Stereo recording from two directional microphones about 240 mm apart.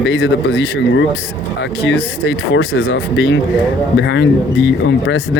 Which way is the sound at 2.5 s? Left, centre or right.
Left.